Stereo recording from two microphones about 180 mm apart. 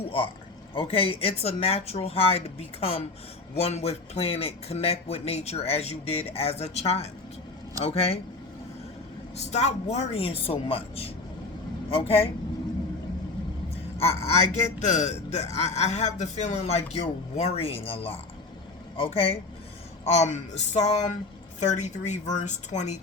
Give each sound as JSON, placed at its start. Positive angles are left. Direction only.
{"t": 0.7, "sound": "a man's voice", "side_deg": 30}
{"t": 9.3, "sound": "a man's voice", "side_deg": 40}
{"t": 14.0, "sound": "a man's voice", "side_deg": 35}